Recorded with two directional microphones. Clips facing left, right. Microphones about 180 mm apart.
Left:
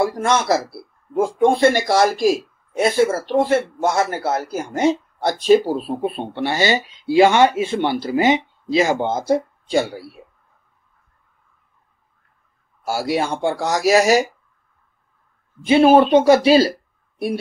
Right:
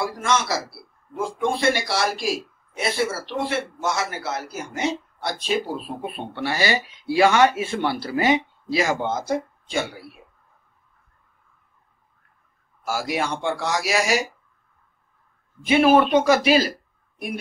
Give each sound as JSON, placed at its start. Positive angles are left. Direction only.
{"t": 0.0, "sound": "speech", "side_deg": 50}
{"t": 5.7, "sound": "speech", "side_deg": 35}
{"t": 12.8, "sound": "speech", "side_deg": 30}
{"t": 15.7, "sound": "speech", "side_deg": 30}